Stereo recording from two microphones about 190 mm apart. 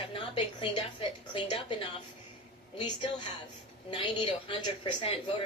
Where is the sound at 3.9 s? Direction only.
25° left (ahead or behind).